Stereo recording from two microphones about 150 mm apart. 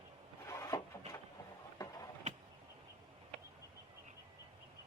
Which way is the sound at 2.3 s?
45° right (ahead or behind).